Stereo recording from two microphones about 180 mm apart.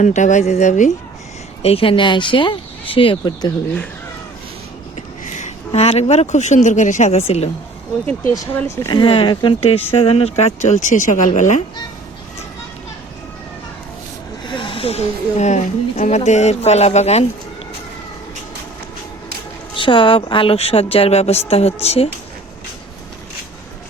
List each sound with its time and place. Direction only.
0.0 s speech: 40° left (ahead or behind)
1.6 s speech: 30° left (ahead or behind)
4.9 s speech: 40° left (ahead or behind)
8.4 s speech: 15° left (ahead or behind)
9.0 s speech: 30° left (ahead or behind)
14.4 s speech: 25° left (ahead or behind)
19.7 s speech: 30° left (ahead or behind)